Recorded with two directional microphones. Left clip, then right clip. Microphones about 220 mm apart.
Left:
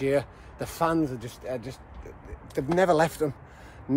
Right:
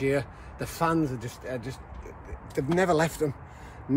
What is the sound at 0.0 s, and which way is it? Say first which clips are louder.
Speech: left 2 dB; 15° left (ahead or behind).